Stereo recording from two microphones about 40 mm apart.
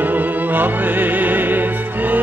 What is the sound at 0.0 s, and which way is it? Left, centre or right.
Music, right.